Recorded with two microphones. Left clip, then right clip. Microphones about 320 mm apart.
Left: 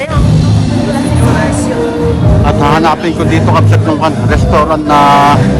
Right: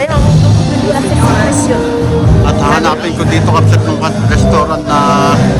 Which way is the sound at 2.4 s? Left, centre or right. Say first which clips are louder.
Left 3 dB; centre.